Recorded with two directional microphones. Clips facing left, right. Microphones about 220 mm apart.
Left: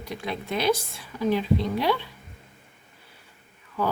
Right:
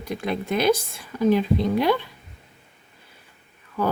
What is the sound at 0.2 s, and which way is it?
Speech, 50° right (ahead or behind).